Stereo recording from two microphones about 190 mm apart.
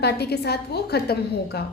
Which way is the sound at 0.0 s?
60° left (ahead or behind).